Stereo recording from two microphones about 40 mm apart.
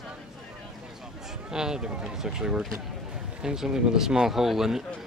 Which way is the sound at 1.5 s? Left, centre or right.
Centre.